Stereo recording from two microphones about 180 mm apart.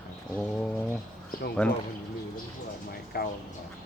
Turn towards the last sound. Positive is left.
turn(degrees=55)  # may be behind; listen again after turning